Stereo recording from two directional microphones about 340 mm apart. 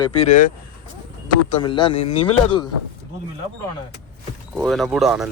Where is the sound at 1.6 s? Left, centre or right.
Centre.